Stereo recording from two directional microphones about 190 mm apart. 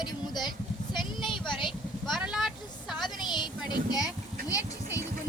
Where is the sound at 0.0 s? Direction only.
20° left (ahead or behind).